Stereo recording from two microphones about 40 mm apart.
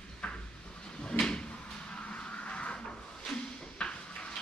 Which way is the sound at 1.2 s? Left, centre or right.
Left.